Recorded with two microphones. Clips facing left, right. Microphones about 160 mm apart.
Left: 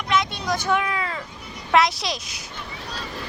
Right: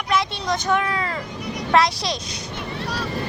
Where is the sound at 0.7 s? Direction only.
10° left (ahead or behind).